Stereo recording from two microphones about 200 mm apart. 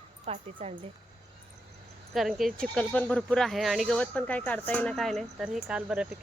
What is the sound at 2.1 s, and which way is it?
Speech, centre (ahead or behind).